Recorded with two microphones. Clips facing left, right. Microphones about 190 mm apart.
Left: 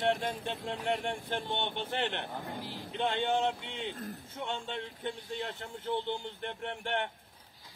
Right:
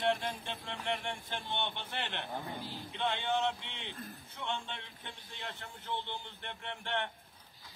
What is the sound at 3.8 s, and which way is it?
Speech, 45° left (ahead or behind).